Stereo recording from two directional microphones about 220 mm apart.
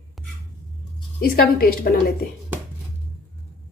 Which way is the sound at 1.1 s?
45° left (ahead or behind).